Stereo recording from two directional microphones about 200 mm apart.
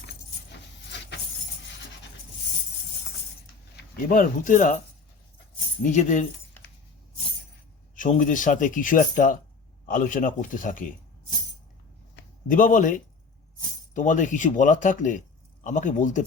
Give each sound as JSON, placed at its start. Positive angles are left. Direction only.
{"t": 0.9, "sound": "vehicle", "side_deg": 60}
{"t": 3.8, "sound": "speech", "side_deg": 45}
{"t": 5.8, "sound": "speech", "side_deg": 40}
{"t": 7.9, "sound": "speech", "side_deg": 40}
{"t": 12.5, "sound": "speech", "side_deg": 40}